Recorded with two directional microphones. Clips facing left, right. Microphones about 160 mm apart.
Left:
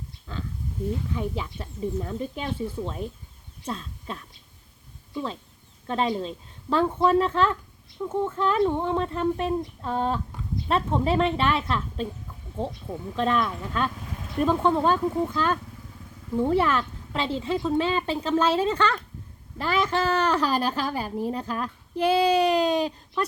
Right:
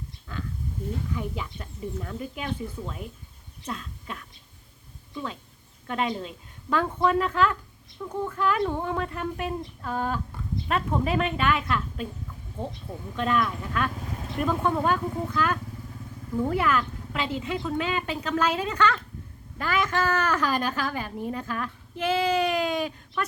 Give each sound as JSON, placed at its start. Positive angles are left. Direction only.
{"t": 1.1, "sound": "speech", "side_deg": 25}
{"t": 12.6, "sound": "speech", "side_deg": 20}